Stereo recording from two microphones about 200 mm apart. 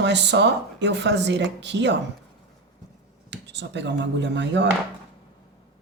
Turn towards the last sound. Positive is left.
turn(degrees=-60)  # may be behind; listen again after turning